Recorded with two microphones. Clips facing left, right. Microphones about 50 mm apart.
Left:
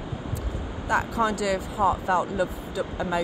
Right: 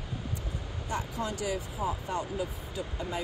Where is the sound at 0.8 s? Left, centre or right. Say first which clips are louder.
Left 10 dB; left.